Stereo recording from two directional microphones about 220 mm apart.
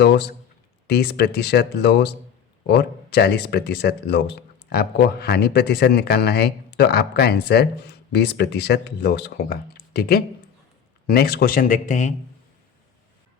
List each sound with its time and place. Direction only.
0.0 s speech: 50° left (ahead or behind); by 12.1 s 35° left (ahead or behind)